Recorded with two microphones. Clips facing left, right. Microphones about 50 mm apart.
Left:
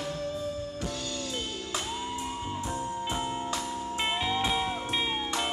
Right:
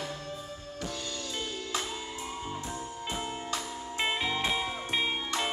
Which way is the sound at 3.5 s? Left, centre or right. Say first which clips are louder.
Left 3 dB; centre.